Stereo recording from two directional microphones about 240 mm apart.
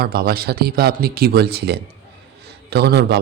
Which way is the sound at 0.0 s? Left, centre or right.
Right.